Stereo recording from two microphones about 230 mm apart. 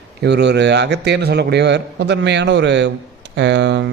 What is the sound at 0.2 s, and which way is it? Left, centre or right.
A man's voice, right.